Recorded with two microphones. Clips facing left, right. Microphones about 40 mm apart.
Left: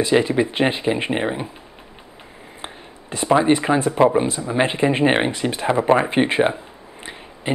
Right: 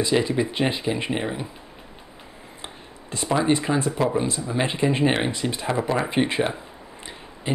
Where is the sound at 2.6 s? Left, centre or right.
Left.